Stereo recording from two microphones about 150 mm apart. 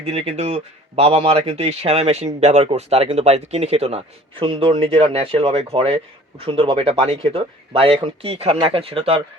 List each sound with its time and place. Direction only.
0.0 s speech: 45° right (ahead or behind)